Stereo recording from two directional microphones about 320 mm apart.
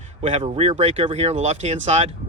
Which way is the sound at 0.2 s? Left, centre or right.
Centre.